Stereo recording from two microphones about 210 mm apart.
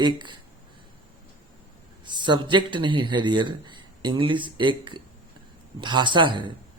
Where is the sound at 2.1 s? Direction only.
20° right (ahead or behind).